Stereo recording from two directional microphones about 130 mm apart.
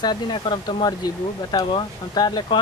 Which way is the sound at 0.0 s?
35° left (ahead or behind).